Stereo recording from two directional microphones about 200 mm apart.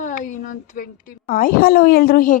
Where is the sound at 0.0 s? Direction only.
40° left (ahead or behind).